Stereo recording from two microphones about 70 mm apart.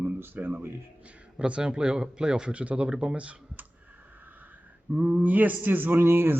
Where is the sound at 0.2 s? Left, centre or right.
Right.